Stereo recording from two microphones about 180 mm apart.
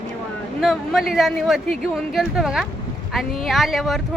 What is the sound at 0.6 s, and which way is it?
Speech, centre (ahead or behind).